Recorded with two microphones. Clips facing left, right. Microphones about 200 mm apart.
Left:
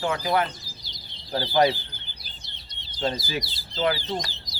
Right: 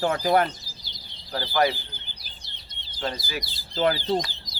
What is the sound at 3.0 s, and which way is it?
Speech, 25° left (ahead or behind).